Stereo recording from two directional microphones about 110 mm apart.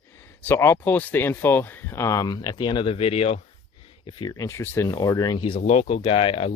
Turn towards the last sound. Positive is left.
turn(degrees=60)  # may be behind; listen again after turning